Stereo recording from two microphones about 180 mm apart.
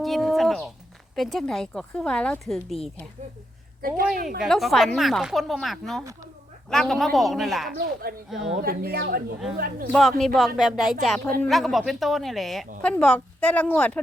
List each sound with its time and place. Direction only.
0.0 s a sound: centre (ahead or behind)
1.1 s speech: centre (ahead or behind)
3.8 s a woman's voice: 55° right (ahead or behind)
4.4 s speech: centre (ahead or behind)
8.6 s speech: 55° right (ahead or behind)
9.9 s speech: centre (ahead or behind)